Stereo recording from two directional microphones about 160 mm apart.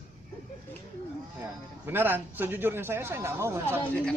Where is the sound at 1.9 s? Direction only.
10° right (ahead or behind).